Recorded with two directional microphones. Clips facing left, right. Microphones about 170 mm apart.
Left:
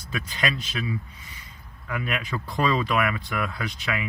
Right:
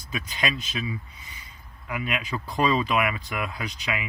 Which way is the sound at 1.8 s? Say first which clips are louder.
Even; 15° right (ahead or behind).